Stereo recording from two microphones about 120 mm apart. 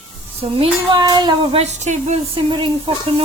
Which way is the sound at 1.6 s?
65° right (ahead or behind).